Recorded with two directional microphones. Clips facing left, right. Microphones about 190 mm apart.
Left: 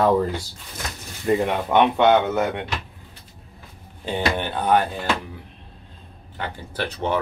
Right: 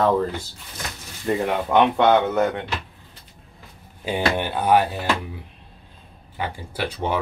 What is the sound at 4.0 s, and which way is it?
Speech, 10° right (ahead or behind).